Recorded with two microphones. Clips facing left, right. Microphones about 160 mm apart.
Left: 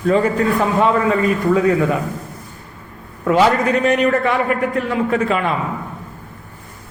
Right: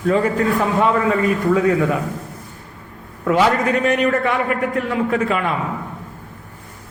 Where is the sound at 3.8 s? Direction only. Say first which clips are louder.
Left 2 dB; 30° left (ahead or behind).